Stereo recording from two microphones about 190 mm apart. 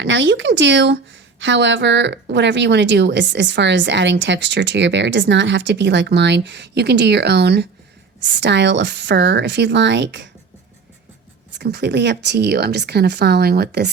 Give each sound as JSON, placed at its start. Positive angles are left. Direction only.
{"t": 0.0, "sound": "speech", "side_deg": -70}
{"t": 11.5, "sound": "speech", "side_deg": -65}